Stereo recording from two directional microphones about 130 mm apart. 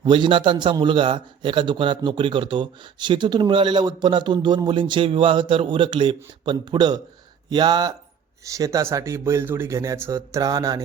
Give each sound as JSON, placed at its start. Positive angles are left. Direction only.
{"t": 0.0, "sound": "a man's voice", "side_deg": -40}